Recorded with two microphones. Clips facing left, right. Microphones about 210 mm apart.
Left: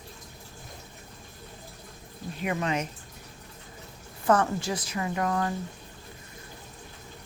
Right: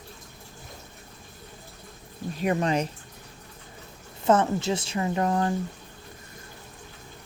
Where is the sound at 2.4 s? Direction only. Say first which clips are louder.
Right 4 dB; 35° right (ahead or behind).